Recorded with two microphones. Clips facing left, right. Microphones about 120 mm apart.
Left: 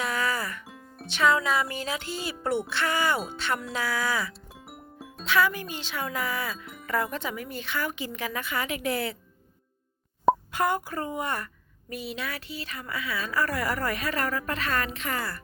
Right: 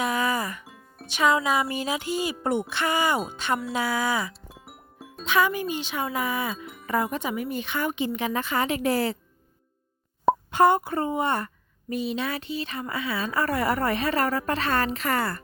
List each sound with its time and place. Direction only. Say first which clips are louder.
0.0 s music: right 3 dB; 15° right (ahead or behind)
1.0 s a woman's voice: right 1 dB; 15° right (ahead or behind)
4.6 s music: left 5 dB; centre (ahead or behind)
5.2 s a woman's voice: right 2 dB; 15° right (ahead or behind); by 9.1 s 35° right (ahead or behind)
10.5 s a woman's voice: right 7 dB; 25° right (ahead or behind)
15.1 s speech: right 6 dB; 60° right (ahead or behind)